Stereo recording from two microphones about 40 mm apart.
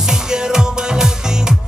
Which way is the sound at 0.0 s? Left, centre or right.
Centre.